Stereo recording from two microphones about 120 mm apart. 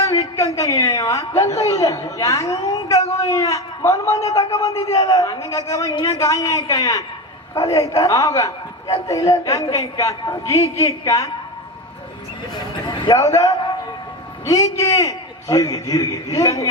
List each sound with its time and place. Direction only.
0.0 s a woman's voice: 30° left (ahead or behind)
12.9 s a sound: 40° left (ahead or behind)
14.4 s a woman's voice: 30° left (ahead or behind)